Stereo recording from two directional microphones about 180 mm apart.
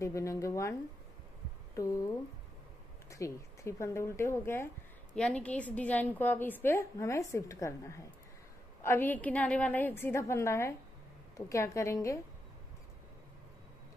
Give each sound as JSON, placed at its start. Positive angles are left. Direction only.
{"t": 0.0, "sound": "a woman's voice", "side_deg": 15}
{"t": 3.1, "sound": "a woman's voice", "side_deg": 15}